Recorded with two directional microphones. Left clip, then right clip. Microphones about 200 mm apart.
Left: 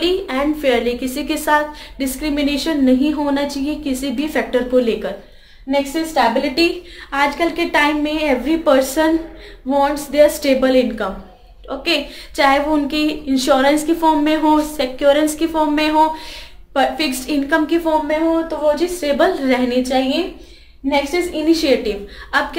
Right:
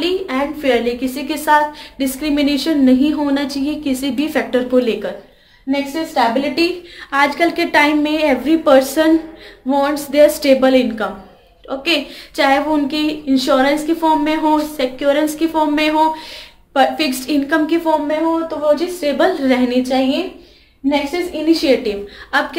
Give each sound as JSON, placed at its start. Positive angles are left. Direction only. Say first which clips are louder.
{"t": 0.0, "sound": "a woman's voice", "louder": "even", "side_deg": 20}
{"t": 5.7, "sound": "speech", "louder": "left 1 dB", "side_deg": 0}
{"t": 7.1, "sound": "a woman's voice", "louder": "right 3 dB", "side_deg": -15}
{"t": 16.7, "sound": "a woman's voice", "louder": "right 2 dB", "side_deg": -15}